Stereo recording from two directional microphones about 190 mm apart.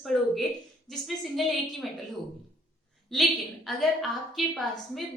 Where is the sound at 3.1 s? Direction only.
Centre (ahead or behind).